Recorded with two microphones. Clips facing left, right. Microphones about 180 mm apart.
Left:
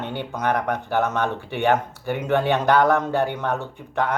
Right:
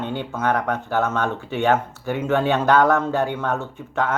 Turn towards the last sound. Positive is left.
turn(degrees=15)  # may be behind; listen again after turning